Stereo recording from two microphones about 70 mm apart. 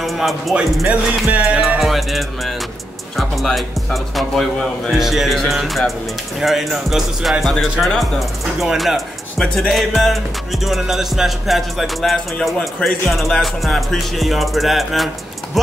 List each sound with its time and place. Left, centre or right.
0.0 s speech: centre
0.8 s music: centre
1.8 s music: centre